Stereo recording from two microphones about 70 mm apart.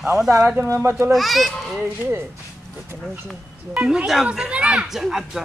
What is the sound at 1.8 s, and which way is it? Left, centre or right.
Speech, right.